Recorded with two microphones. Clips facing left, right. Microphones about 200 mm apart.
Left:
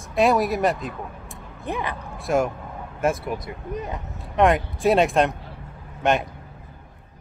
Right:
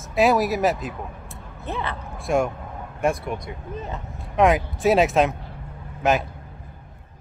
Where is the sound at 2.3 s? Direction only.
Centre (ahead or behind).